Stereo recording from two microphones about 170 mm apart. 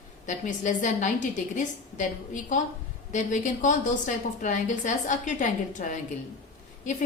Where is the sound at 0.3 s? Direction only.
45° left (ahead or behind).